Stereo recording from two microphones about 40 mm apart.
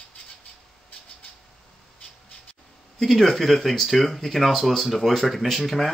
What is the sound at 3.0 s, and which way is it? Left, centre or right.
Speech, centre.